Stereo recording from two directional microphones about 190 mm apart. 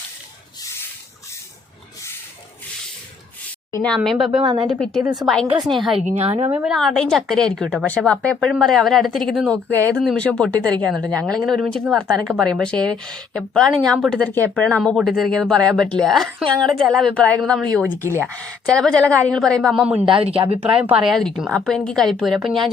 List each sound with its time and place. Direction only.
3.8 s a woman's voice: 5° left (ahead or behind)
6.1 s a woman's voice: 35° right (ahead or behind)
6.5 s a woman's voice: 5° right (ahead or behind)
20.1 s speech: 30° right (ahead or behind)
20.9 s a woman's voice: centre (ahead or behind)